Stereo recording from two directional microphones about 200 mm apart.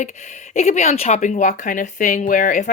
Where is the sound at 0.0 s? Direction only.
35° left (ahead or behind).